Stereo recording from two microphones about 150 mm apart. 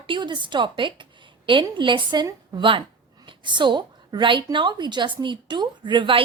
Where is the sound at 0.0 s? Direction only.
35° right (ahead or behind).